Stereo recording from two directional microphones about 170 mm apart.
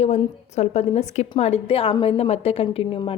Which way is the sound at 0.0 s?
40° left (ahead or behind).